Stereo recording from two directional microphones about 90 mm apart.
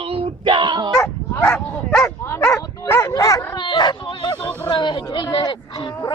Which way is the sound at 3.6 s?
55° left (ahead or behind).